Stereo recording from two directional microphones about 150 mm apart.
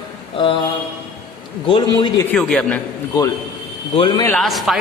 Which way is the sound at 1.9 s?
25° left (ahead or behind).